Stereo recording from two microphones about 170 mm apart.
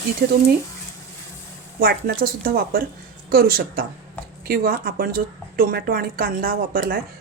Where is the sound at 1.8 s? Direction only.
60° right (ahead or behind).